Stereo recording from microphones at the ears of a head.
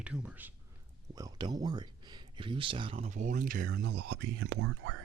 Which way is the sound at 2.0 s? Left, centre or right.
Right.